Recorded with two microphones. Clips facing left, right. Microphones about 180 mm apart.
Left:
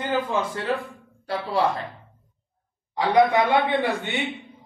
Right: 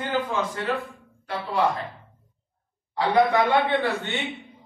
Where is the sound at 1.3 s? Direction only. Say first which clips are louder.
Left 1 dB; 30° left (ahead or behind).